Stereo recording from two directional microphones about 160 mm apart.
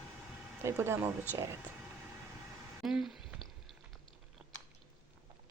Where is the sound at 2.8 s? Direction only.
Centre (ahead or behind).